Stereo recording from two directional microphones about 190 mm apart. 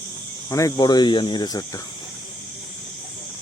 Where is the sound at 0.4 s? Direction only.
15° left (ahead or behind).